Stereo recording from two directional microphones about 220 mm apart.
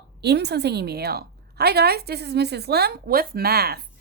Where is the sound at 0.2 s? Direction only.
50° right (ahead or behind).